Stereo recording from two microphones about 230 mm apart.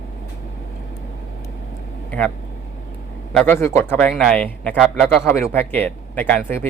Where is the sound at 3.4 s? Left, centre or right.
Centre.